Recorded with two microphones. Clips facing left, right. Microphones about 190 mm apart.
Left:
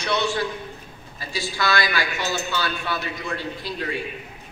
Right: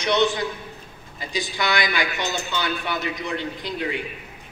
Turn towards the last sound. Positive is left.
turn(degrees=-20)  # may be behind; listen again after turning